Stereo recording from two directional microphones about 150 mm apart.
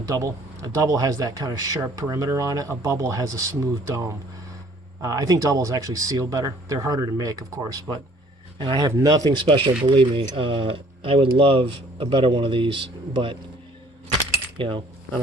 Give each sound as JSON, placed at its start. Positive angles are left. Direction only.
{"t": 0.1, "sound": "speech", "side_deg": -25}
{"t": 14.6, "sound": "speech", "side_deg": -35}